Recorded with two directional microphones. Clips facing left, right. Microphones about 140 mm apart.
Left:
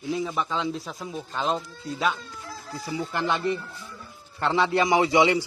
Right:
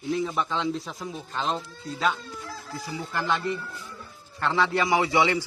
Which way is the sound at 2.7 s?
20° left (ahead or behind).